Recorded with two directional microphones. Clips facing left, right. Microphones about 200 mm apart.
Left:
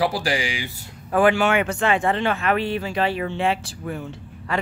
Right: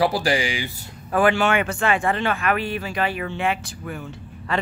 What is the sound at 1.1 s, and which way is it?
Speech, 15° left (ahead or behind).